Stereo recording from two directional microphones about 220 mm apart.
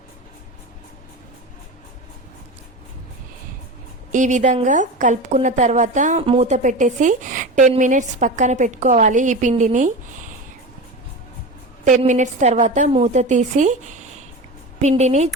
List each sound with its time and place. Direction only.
4.1 s a woman's voice: 35° right (ahead or behind)
11.9 s a woman's voice: 35° right (ahead or behind)